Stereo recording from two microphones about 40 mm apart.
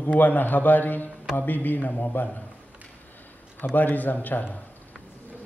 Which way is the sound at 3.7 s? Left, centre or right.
Left.